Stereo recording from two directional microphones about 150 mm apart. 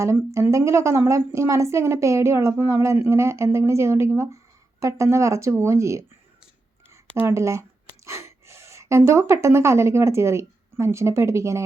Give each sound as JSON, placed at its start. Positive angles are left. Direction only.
{"t": 0.0, "sound": "a woman's voice", "side_deg": -20}
{"t": 7.2, "sound": "speech", "side_deg": -15}